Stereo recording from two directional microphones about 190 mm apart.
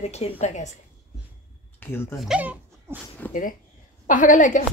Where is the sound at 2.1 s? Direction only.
5° right (ahead or behind).